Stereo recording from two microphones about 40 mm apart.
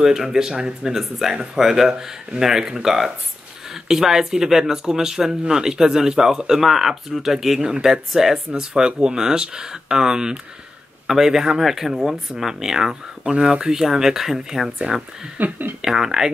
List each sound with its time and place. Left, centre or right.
0.0 s speech: centre
7.6 s speech: centre
8.5 s speech: right
14.8 s speech: centre
15.3 s speech: right
15.8 s speech: centre